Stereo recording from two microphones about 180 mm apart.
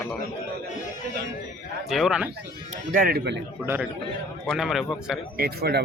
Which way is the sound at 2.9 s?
55° right (ahead or behind).